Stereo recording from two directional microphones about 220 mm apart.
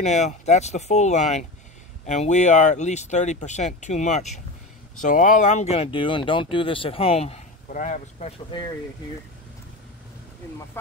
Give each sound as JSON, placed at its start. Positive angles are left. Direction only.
{"t": 0.0, "sound": "speech", "side_deg": 30}